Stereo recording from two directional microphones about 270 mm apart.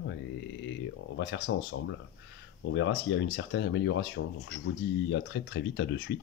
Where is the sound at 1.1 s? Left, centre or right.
Left.